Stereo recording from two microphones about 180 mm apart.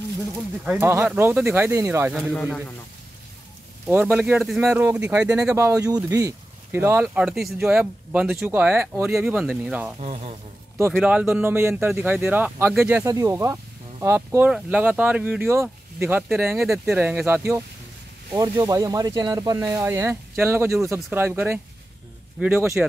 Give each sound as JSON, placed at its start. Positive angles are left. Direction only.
{"t": 0.7, "sound": "speech", "side_deg": -10}
{"t": 2.1, "sound": "speech", "side_deg": -5}
{"t": 3.8, "sound": "speech", "side_deg": -10}
{"t": 9.9, "sound": "speech", "side_deg": -35}
{"t": 10.9, "sound": "speech", "side_deg": 0}